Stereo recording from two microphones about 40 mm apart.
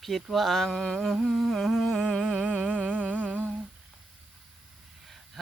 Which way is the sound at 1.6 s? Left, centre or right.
Centre.